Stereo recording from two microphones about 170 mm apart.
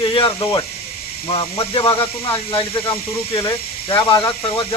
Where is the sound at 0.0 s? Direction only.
30° left (ahead or behind).